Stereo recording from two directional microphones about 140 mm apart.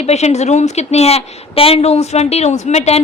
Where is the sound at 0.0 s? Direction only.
50° left (ahead or behind).